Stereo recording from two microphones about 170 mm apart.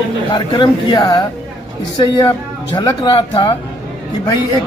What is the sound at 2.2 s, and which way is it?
Speech, 25° left (ahead or behind).